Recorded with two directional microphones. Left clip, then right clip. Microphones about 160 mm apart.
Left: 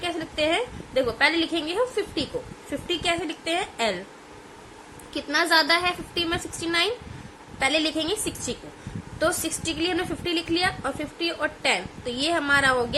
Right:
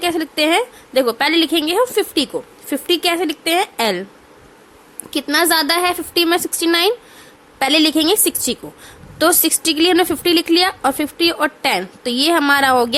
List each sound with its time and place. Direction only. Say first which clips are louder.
0.0 s a woman's voice: right 8 dB; 90° right
5.1 s a woman's voice: right 6 dB; 85° right